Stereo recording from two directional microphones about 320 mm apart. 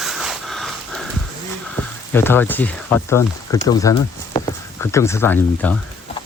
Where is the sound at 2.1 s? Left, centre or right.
Centre.